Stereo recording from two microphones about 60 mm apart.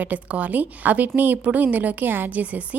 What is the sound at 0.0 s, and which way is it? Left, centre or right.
A woman's voice, right.